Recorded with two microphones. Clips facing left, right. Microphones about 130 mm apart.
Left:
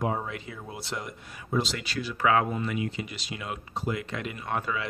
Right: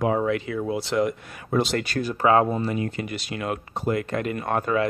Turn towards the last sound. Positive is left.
turn(degrees=-50)  # may be behind; listen again after turning